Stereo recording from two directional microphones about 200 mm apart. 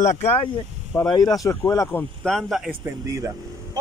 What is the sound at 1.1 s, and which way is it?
Speech, 20° left (ahead or behind).